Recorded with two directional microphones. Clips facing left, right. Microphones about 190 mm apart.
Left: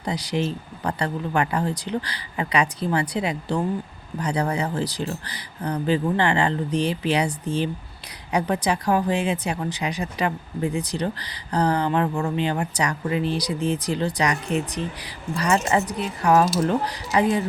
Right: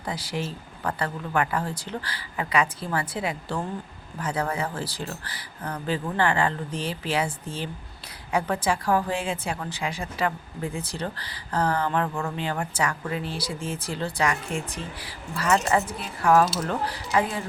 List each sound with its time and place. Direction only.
0.0 s a woman's voice: 20° left (ahead or behind)
8.3 s a woman's voice: 20° left (ahead or behind)